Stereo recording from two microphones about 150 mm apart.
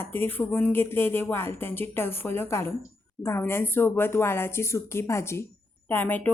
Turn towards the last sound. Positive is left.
turn(degrees=10)  # may be behind; listen again after turning